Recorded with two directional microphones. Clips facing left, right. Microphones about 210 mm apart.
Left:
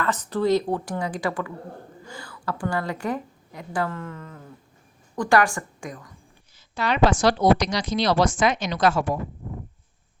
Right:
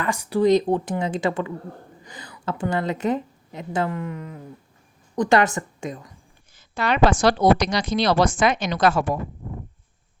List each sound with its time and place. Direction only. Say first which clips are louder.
0.0 s a woman's voice: right 4 dB; 10° right (ahead or behind)
6.6 s a woman's voice: right 1 dB; 55° right (ahead or behind)